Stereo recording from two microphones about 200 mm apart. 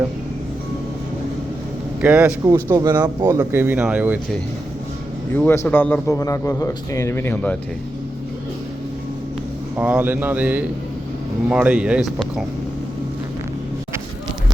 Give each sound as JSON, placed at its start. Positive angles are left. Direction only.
{"t": 2.0, "sound": "speech", "side_deg": -5}
{"t": 2.5, "sound": "speech", "side_deg": -15}
{"t": 5.3, "sound": "a man's voice", "side_deg": 10}
{"t": 9.7, "sound": "speech", "side_deg": -10}